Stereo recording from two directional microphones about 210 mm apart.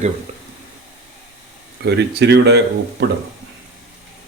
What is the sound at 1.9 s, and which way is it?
Speech, 55° right (ahead or behind).